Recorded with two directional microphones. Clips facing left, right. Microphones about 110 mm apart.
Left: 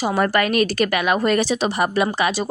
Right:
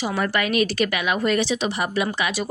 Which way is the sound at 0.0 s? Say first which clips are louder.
Left 5 dB; 45° left (ahead or behind).